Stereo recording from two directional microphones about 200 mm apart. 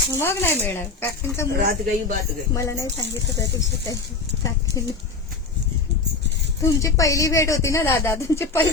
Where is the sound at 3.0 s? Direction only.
60° left (ahead or behind).